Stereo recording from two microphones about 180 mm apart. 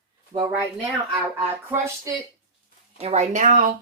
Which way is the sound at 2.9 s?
40° right (ahead or behind).